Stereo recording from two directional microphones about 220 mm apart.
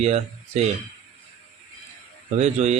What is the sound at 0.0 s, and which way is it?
Speech, 30° right (ahead or behind).